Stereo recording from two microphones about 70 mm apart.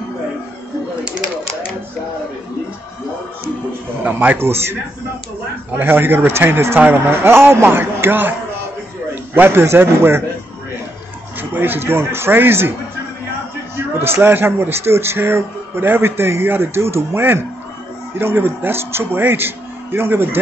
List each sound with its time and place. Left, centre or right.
4.2 s speech: right
4.5 s a man's voice: right
5.8 s a man's voice: right
11.5 s a man's voice: right
13.9 s a man's voice: right